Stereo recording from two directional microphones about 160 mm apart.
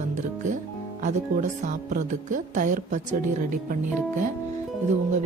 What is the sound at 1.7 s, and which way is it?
Speech, 50° right (ahead or behind).